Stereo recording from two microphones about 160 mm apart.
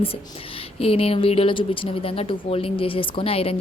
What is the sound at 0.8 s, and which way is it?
Speech, 35° left (ahead or behind).